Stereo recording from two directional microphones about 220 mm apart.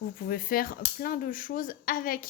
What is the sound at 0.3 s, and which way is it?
A woman's voice, 40° left (ahead or behind).